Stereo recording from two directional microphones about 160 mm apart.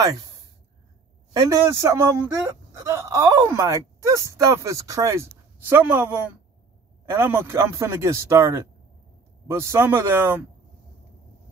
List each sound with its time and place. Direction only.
1.5 s speech: 15° right (ahead or behind)